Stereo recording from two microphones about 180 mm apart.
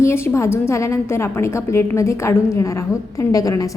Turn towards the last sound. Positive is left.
turn(degrees=20)  # may be behind; listen again after turning